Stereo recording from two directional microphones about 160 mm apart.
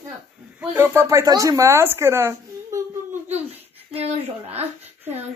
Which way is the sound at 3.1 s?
40° right (ahead or behind).